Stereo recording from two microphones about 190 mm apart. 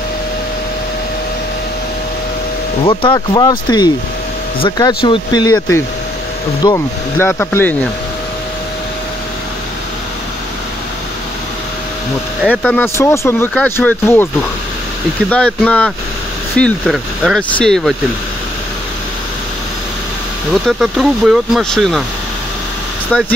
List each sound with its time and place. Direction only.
2.8 s speech: 25° left (ahead or behind); by 7.9 s 10° left (ahead or behind)
12.4 s speech: 10° left (ahead or behind)
20.6 s speech: centre (ahead or behind)
23.1 s speech: 5° left (ahead or behind)